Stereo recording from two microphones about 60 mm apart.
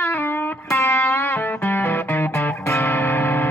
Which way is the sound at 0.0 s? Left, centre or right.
Left.